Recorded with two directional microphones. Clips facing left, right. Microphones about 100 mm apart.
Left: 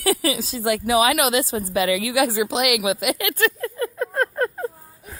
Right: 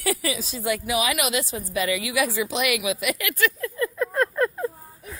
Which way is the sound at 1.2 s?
40° left (ahead or behind).